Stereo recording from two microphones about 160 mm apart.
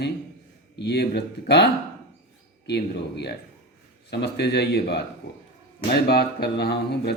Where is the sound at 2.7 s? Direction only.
90° left.